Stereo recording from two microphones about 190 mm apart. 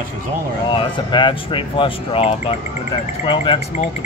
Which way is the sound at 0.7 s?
25° left (ahead or behind).